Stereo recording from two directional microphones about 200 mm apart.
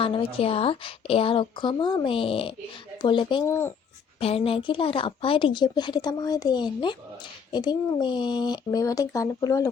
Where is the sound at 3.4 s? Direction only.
15° left (ahead or behind).